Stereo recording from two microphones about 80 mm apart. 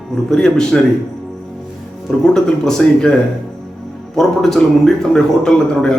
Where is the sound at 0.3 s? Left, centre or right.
Centre.